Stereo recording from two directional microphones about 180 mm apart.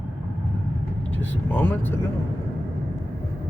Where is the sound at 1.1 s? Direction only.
10° left (ahead or behind).